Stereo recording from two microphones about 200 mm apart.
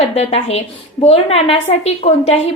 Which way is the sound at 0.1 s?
30° left (ahead or behind).